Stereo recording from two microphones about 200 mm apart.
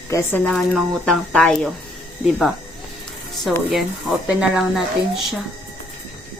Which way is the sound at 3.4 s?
Centre (ahead or behind).